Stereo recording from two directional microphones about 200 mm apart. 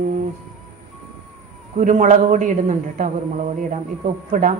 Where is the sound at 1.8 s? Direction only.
40° right (ahead or behind).